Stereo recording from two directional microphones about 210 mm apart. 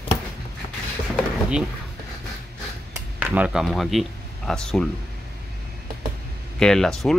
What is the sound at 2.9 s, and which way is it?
Speech, 10° right (ahead or behind).